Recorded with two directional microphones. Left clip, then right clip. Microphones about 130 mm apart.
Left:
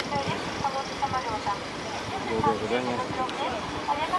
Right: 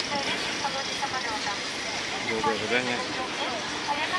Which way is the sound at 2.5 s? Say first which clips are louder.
Right 1 dB; 20° right (ahead or behind).